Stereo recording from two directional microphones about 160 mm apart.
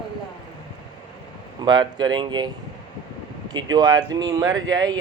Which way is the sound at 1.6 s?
30° right (ahead or behind).